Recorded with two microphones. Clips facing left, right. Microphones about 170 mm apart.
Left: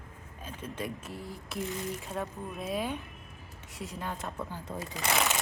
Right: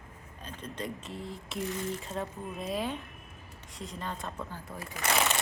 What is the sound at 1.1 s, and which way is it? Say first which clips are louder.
Speech: right 1 dB; 25° right (ahead or behind).